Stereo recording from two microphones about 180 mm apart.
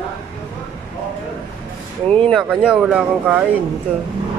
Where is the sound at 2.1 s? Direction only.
5° left (ahead or behind).